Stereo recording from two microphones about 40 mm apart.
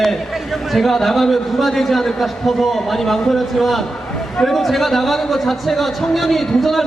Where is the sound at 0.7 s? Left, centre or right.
Centre.